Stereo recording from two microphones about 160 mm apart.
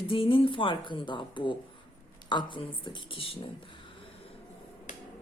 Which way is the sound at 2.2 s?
30° left (ahead or behind).